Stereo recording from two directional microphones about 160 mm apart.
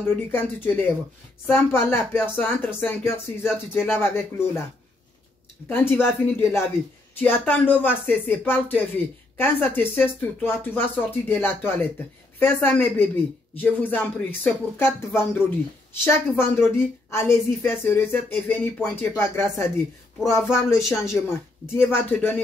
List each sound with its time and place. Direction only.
0.1 s speech: 10° left (ahead or behind)
5.7 s speech: 15° left (ahead or behind)